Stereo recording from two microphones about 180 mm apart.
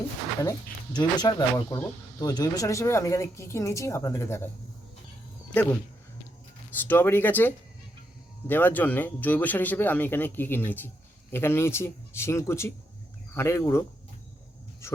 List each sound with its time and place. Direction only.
0.9 s speech: 25° left (ahead or behind)
6.8 s speech: 10° left (ahead or behind)
14.8 s a sound: 15° left (ahead or behind)